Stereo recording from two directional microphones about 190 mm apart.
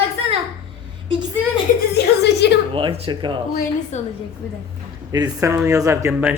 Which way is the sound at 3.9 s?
40° left (ahead or behind).